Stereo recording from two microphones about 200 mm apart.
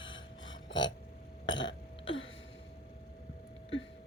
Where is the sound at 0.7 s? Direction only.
20° left (ahead or behind).